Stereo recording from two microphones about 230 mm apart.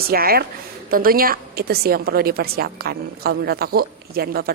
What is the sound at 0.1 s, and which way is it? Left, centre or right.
A woman's voice, right.